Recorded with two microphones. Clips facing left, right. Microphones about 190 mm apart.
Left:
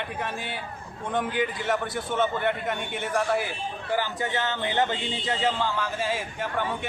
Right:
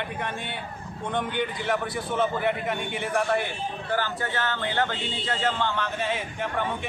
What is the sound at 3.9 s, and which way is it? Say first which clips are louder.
Speech: left 1 dB; 15° left (ahead or behind).